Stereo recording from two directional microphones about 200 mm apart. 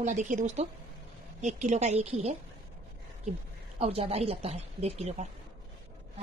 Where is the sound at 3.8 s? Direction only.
30° right (ahead or behind).